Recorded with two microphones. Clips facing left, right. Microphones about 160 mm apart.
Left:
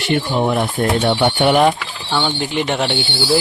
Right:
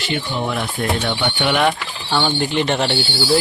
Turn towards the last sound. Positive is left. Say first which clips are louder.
# even
turn(degrees=0)  # may be behind; listen again after turning